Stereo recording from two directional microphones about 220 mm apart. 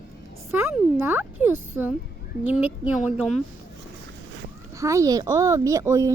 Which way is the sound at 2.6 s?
5° right (ahead or behind).